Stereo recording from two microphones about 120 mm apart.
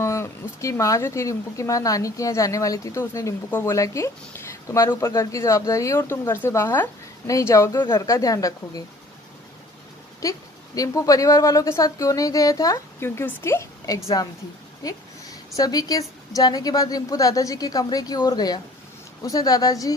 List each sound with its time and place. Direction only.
0.0 s speech: 25° left (ahead or behind)
10.2 s speech: 30° left (ahead or behind)
15.5 s a woman's voice: 30° left (ahead or behind)